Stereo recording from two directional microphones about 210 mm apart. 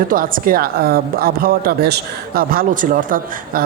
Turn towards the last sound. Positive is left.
turn(degrees=-40)  # may be behind; listen again after turning